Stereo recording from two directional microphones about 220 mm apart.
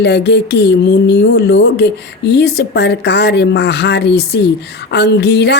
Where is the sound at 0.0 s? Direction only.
50° left (ahead or behind).